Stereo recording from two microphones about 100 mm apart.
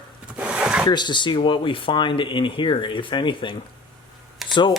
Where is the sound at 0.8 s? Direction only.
50° left (ahead or behind).